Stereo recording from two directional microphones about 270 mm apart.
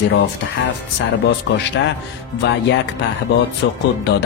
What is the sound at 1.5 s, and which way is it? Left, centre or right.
Speech, left.